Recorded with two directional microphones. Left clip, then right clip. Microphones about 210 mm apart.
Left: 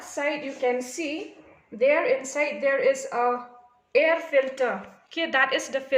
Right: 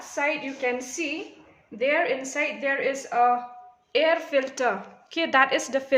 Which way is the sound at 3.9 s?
20° right (ahead or behind).